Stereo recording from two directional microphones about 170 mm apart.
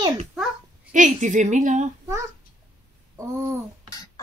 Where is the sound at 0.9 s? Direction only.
45° right (ahead or behind).